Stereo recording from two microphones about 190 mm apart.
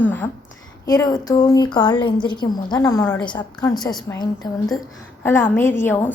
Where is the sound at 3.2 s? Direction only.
25° left (ahead or behind).